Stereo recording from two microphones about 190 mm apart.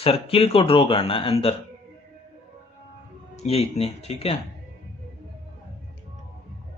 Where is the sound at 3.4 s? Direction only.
35° left (ahead or behind).